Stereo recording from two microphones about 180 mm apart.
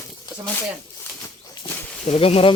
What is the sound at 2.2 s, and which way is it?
Speech, 30° left (ahead or behind).